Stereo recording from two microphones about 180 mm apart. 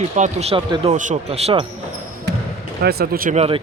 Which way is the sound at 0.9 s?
40° right (ahead or behind).